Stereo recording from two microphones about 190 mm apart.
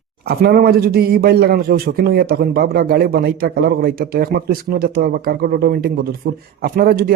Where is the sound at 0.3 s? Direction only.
55° right (ahead or behind).